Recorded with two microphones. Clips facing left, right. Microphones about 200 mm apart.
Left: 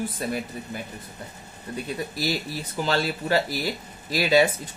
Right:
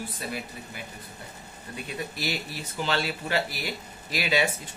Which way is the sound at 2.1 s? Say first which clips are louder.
Left 5 dB; 40° left (ahead or behind).